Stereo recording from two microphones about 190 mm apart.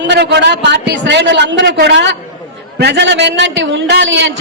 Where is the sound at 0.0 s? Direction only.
65° right (ahead or behind).